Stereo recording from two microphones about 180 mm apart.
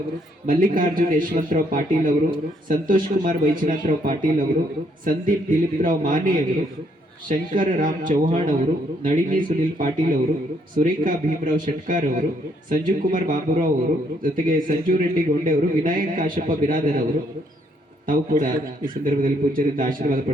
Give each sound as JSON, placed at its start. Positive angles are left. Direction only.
{"t": 0.4, "sound": "a man's voice", "side_deg": -50}
{"t": 18.1, "sound": "a man's voice", "side_deg": -50}